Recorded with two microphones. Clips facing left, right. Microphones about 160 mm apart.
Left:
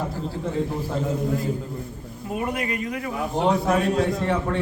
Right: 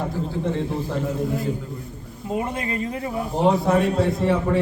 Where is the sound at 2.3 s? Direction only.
25° right (ahead or behind).